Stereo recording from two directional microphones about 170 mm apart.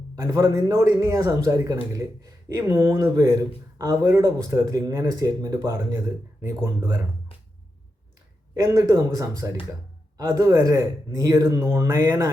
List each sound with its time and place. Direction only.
0.2 s speech: 15° right (ahead or behind)
8.5 s speech: 20° right (ahead or behind)